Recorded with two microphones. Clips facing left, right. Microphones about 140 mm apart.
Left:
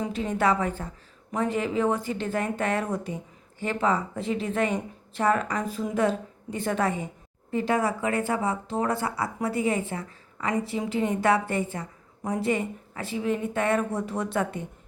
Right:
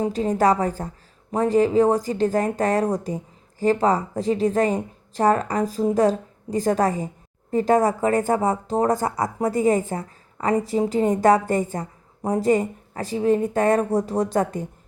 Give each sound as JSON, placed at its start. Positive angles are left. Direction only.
{"t": 0.0, "sound": "speech", "side_deg": -35}